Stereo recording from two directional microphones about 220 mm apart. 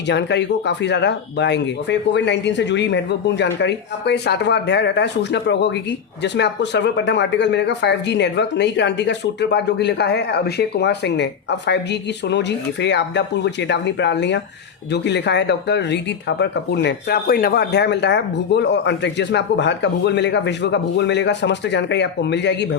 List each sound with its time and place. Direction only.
0.1 s speech: 50° left (ahead or behind)